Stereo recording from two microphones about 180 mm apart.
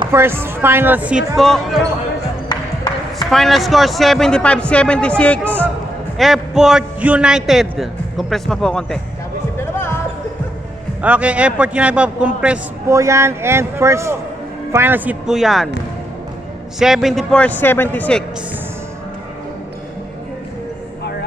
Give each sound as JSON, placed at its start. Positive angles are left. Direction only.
{"t": 0.1, "sound": "a man's voice", "side_deg": -15}
{"t": 2.5, "sound": "music", "side_deg": 25}
{"t": 3.3, "sound": "a man's voice", "side_deg": 0}
{"t": 9.6, "sound": "music", "side_deg": 15}
{"t": 11.0, "sound": "a man's voice", "side_deg": -10}
{"t": 16.8, "sound": "a man's voice", "side_deg": 0}